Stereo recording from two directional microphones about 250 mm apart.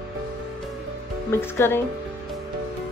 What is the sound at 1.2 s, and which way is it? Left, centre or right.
Speech, centre.